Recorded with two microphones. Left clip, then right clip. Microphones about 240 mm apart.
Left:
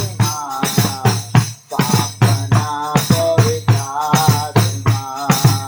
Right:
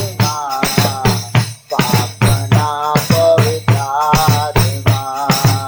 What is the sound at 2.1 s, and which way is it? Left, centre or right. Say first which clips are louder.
Music: right 2 dB; right.